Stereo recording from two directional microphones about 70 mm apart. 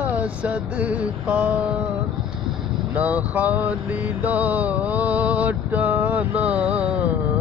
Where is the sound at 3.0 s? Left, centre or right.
Right.